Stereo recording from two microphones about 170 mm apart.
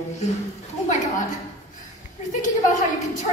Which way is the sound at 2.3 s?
45° left (ahead or behind).